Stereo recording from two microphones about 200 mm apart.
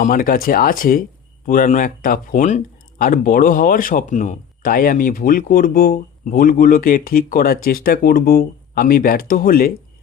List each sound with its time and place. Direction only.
0.0 s speech: 45° left (ahead or behind)